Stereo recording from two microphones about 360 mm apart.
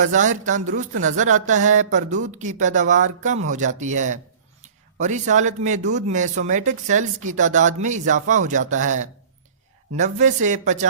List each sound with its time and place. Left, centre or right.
0.0 s speech: right